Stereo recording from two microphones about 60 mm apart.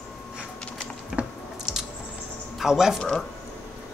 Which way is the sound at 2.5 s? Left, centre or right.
Centre.